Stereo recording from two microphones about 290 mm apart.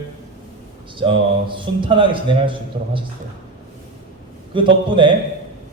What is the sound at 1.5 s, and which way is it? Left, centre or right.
A man's voice, centre.